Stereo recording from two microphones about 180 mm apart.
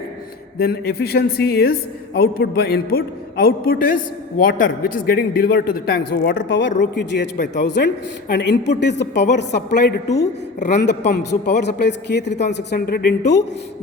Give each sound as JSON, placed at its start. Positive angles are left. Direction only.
{"t": 0.6, "sound": "a man's voice", "side_deg": 60}